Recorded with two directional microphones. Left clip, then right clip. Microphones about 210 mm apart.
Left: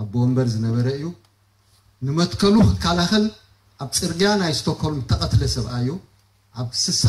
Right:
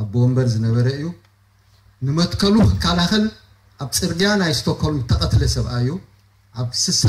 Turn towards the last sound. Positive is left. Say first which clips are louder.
# right 2 dB
turn(degrees=-35)  # may be behind; listen again after turning